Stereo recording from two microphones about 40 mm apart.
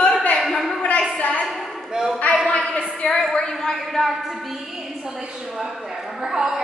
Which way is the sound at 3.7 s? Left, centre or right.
Centre.